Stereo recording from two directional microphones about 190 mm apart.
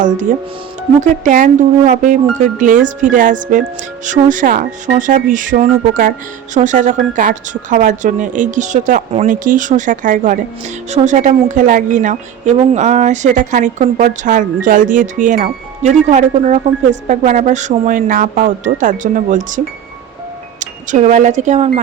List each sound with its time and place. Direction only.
0.9 s a woman's voice: 40° right (ahead or behind)